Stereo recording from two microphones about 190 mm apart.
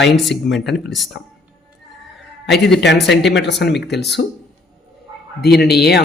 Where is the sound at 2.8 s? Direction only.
65° left (ahead or behind).